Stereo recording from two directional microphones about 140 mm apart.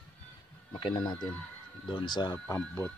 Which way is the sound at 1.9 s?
35° left (ahead or behind).